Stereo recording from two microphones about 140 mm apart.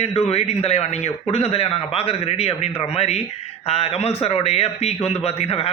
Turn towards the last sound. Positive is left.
turn(degrees=45)  # may be behind; listen again after turning